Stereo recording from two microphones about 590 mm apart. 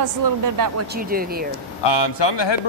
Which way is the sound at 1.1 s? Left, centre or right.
Centre.